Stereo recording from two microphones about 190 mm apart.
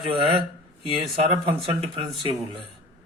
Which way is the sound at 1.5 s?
30° right (ahead or behind).